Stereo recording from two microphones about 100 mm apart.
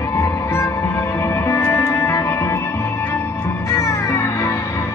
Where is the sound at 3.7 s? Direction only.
30° left (ahead or behind).